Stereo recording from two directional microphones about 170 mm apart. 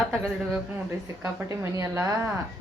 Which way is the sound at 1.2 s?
15° right (ahead or behind).